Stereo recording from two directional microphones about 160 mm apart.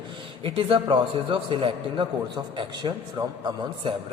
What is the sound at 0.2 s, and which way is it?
A man's voice, 35° right (ahead or behind).